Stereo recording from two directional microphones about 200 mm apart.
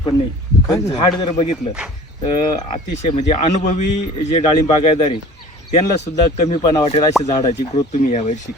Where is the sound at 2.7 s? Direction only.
35° left (ahead or behind).